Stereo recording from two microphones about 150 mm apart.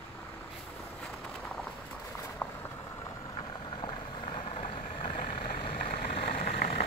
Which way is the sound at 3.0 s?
25° left (ahead or behind).